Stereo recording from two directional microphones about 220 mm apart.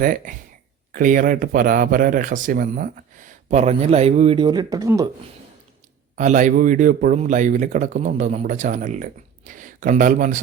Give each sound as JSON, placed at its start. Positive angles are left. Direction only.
{"t": 0.0, "sound": "speech", "side_deg": -40}
{"t": 6.1, "sound": "speech", "side_deg": -35}